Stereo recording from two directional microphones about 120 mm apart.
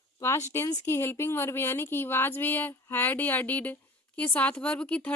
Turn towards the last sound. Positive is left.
turn(degrees=10)  # may be behind; listen again after turning